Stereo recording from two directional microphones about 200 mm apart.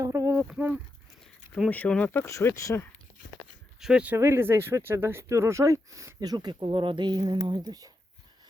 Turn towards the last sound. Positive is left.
turn(degrees=-20)  # may be behind; listen again after turning